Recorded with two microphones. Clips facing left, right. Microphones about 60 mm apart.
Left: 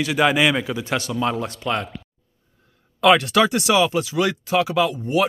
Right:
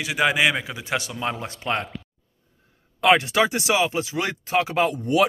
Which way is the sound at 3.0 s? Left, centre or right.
Right.